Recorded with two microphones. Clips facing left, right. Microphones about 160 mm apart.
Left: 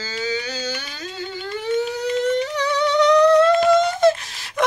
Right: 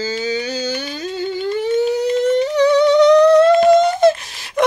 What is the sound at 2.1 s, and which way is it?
Humming, 30° right (ahead or behind).